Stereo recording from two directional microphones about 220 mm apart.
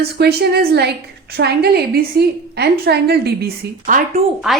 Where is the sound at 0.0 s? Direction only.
45° right (ahead or behind).